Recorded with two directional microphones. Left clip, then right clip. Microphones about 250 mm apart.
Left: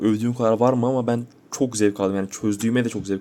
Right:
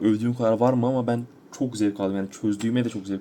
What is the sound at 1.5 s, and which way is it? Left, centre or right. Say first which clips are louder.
Speech: left 5 dB; left.